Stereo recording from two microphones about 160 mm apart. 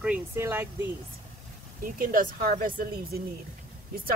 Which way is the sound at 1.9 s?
55° right (ahead or behind).